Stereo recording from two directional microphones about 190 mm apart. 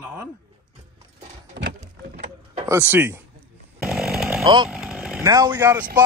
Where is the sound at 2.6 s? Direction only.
15° right (ahead or behind).